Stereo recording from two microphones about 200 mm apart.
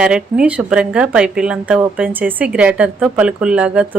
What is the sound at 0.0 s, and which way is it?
Speech, 5° right (ahead or behind).